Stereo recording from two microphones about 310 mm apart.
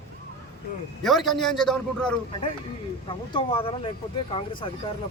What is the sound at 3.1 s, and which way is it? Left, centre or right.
Speech, centre.